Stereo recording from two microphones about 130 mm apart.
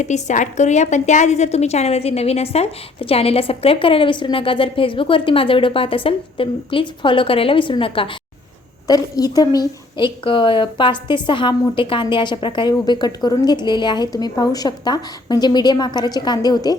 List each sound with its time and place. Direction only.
0.0 s a woman's voice: 65° left (ahead or behind); by 8.1 s 45° left (ahead or behind)
8.9 s a woman's voice: 30° left (ahead or behind)